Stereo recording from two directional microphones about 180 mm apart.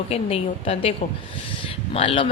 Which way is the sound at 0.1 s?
35° left (ahead or behind).